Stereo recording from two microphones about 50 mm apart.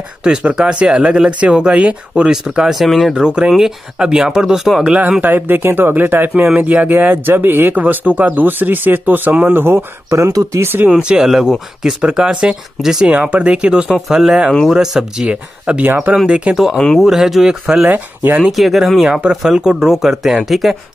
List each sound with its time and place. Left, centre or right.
0.2 s speech: centre
2.7 s speech: centre
3.3 s speech: centre
4.8 s speech: right
5.2 s speech: right
10.1 s speech: right
10.9 s speech: centre
11.2 s speech: centre
13.8 s speech: centre; by 16.5 s right
16.5 s speech: centre
17.8 s speech: right
18.4 s speech: centre